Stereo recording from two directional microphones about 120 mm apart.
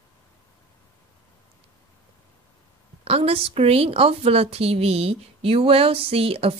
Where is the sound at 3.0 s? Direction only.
55° right (ahead or behind).